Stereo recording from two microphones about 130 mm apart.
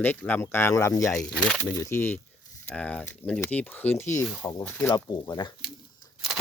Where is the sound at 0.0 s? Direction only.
15° left (ahead or behind).